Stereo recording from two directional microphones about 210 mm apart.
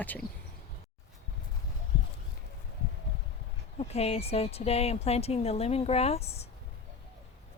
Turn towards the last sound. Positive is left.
turn(degrees=30)  # may be behind; listen again after turning